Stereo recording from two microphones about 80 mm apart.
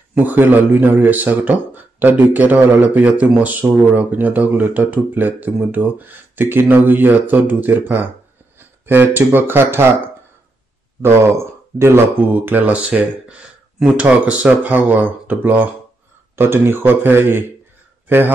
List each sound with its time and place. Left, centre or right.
0.2 s a man's voice: right
11.0 s a man's voice: right